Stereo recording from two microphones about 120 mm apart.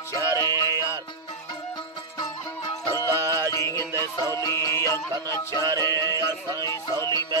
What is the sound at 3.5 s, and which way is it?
Music, 30° left (ahead or behind).